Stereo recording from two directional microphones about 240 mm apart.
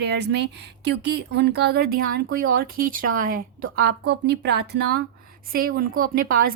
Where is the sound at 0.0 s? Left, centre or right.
Right.